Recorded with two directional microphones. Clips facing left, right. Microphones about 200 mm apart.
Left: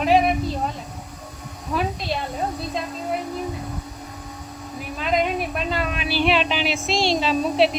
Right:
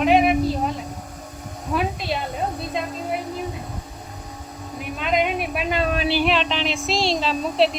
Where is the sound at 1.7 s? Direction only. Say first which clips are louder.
Right 1 dB; centre (ahead or behind).